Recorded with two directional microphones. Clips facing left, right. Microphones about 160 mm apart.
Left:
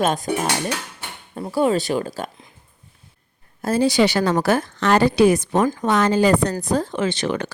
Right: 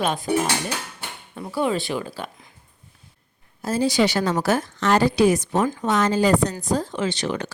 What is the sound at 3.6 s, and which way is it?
A woman's voice, 65° left (ahead or behind).